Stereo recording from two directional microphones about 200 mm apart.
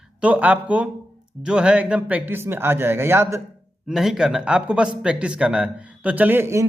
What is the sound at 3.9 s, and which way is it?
Speech, centre (ahead or behind).